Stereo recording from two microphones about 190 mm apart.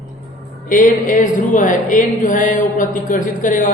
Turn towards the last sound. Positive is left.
turn(degrees=45)  # may be behind; listen again after turning